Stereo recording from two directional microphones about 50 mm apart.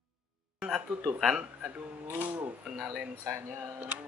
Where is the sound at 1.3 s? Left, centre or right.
Right.